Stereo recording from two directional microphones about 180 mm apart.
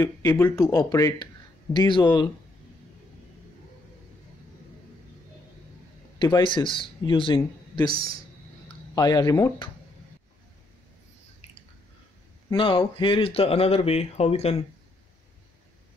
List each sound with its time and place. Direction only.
0.0 s speech: 15° left (ahead or behind)
6.1 s speech: 25° left (ahead or behind)
7.9 s speech: 30° right (ahead or behind)
8.9 s speech: 20° left (ahead or behind)
12.4 s speech: 30° left (ahead or behind)